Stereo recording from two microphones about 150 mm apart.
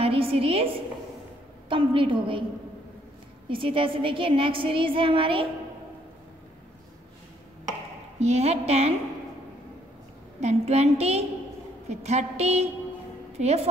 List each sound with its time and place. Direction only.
0.0 s a woman's voice: 40° right (ahead or behind)
3.4 s a woman's voice: 35° right (ahead or behind)
8.2 s a woman's voice: 45° right (ahead or behind)
10.4 s a woman's voice: 45° right (ahead or behind)